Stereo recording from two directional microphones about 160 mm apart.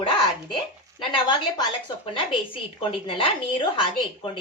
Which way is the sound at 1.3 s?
30° left (ahead or behind).